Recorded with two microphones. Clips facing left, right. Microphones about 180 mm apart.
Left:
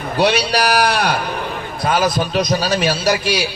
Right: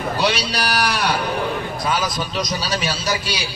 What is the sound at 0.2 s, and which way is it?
A man's voice, 55° left (ahead or behind).